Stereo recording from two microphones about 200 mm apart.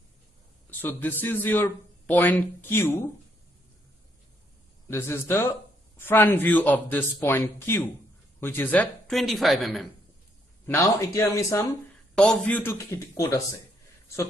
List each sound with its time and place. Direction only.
0.7 s a man's voice: 10° left (ahead or behind)
4.8 s speech: 10° left (ahead or behind)
10.7 s speech: 10° left (ahead or behind)